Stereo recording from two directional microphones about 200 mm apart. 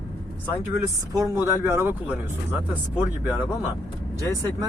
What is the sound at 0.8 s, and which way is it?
Speech, 15° right (ahead or behind).